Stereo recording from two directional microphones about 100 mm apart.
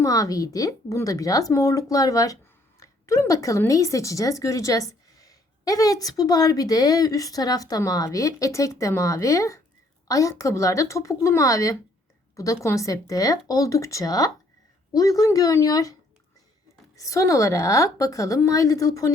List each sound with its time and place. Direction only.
0.0 s a woman's voice: 35° left (ahead or behind)